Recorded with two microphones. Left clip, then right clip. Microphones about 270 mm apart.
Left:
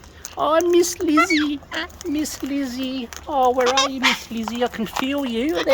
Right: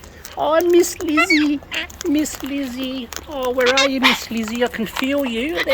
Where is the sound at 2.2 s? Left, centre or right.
Centre; by 4.0 s left.